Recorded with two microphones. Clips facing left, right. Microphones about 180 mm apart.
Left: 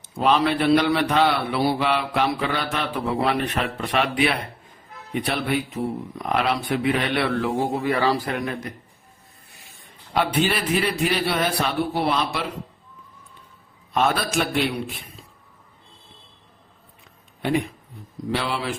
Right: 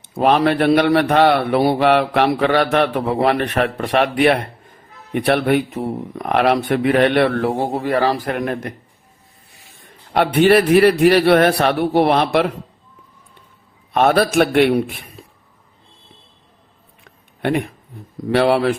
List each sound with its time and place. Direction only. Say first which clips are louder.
0.2 s a man's voice: right 5 dB; 55° right (ahead or behind)
9.8 s a man's voice: right 5 dB; 55° right (ahead or behind)
13.9 s a man's voice: right 8 dB; 60° right (ahead or behind)
17.4 s a man's voice: right 4 dB; 60° right (ahead or behind)